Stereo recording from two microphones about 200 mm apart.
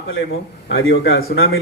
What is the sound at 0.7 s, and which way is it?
Speech, 55° left (ahead or behind).